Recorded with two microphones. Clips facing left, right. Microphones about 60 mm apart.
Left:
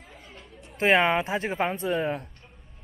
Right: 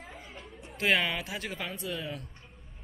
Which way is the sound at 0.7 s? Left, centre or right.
Left.